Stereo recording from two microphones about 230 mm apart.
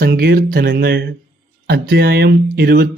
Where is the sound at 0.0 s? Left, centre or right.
Right.